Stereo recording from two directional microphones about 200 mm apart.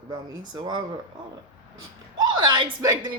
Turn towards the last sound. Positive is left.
turn(degrees=-20)  # may be behind; listen again after turning